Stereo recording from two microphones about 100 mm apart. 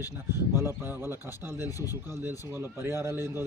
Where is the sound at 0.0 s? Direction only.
25° right (ahead or behind).